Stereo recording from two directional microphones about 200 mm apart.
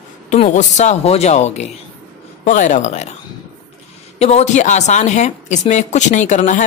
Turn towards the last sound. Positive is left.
turn(degrees=40)  # may be behind; listen again after turning